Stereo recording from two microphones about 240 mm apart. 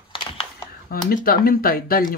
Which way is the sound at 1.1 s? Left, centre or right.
Left.